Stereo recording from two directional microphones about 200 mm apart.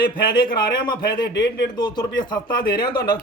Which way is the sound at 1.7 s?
20° left (ahead or behind).